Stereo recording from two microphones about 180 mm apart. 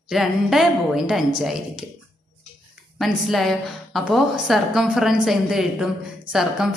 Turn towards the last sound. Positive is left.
turn(degrees=0)  # may be behind; listen again after turning